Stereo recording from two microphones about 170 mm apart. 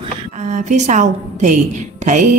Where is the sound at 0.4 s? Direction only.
45° right (ahead or behind).